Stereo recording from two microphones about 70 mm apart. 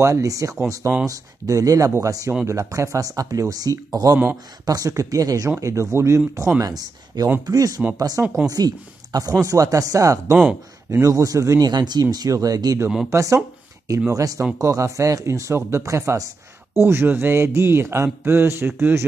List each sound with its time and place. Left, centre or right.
0.0 s speech: right
5.6 s speech: right
6.6 s speech: right
9.4 s speech: right
11.6 s speech: right
13.1 s speech: right
16.7 s speech: right